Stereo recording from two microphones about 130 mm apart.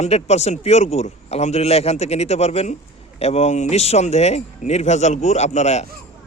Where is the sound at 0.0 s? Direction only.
55° left (ahead or behind).